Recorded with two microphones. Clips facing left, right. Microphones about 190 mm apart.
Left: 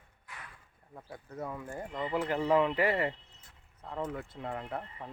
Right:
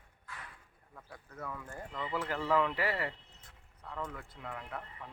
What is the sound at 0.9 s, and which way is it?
Speech, 30° left (ahead or behind).